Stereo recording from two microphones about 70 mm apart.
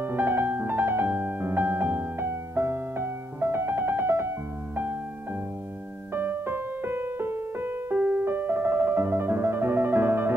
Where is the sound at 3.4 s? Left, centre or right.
Right.